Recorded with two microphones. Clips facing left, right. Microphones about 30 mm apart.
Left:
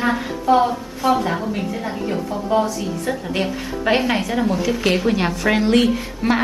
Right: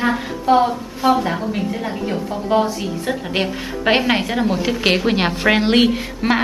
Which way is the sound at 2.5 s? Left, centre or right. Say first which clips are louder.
Right 2 dB; right.